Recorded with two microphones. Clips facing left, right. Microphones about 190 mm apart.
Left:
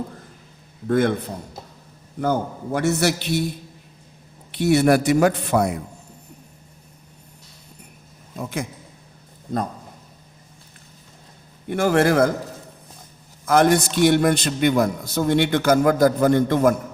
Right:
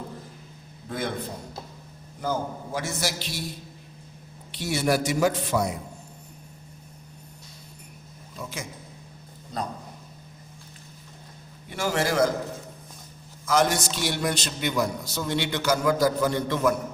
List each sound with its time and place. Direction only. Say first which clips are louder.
0.9 s a man's voice: left 12 dB; 60° left (ahead or behind)
2.2 s a man's voice: left 6 dB; 60° left (ahead or behind)
4.5 s a man's voice: left 8 dB; 60° left (ahead or behind)
8.4 s a man's voice: left 8 dB; 55° left (ahead or behind)
11.7 s a man's voice: left 8 dB; 55° left (ahead or behind)
13.4 s a man's voice: left 6 dB; 55° left (ahead or behind)